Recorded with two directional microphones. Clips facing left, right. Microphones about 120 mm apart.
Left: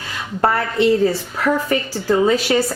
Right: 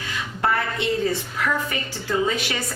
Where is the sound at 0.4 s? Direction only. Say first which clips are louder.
Left 7 dB; 40° left (ahead or behind).